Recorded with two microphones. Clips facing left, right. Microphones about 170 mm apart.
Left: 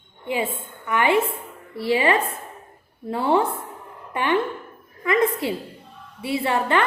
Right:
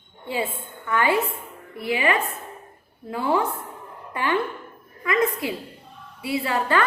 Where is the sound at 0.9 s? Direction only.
20° left (ahead or behind).